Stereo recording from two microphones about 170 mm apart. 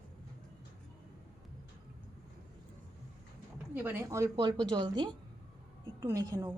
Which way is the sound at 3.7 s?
10° right (ahead or behind).